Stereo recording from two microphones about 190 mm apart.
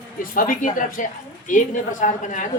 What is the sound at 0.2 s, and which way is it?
A woman's voice, 45° left (ahead or behind).